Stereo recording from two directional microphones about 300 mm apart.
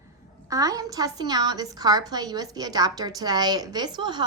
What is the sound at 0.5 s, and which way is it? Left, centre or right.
A woman's voice, centre.